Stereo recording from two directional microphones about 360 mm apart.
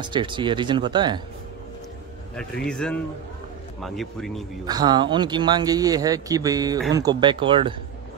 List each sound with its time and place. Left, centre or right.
0.0 s speech: centre
2.6 s speech: centre
4.6 s speech: centre